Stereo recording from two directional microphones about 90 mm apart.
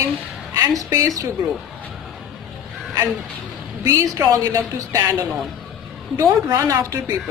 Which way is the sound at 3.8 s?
30° right (ahead or behind).